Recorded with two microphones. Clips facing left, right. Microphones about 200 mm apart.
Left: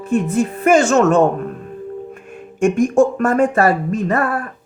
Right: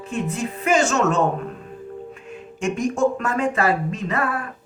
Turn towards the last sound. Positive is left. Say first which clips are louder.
# left 6 dB
turn(degrees=50)  # may be behind; listen again after turning